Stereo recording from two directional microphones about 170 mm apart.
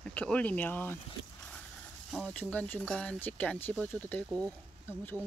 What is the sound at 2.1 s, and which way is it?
Speech, 5° left (ahead or behind).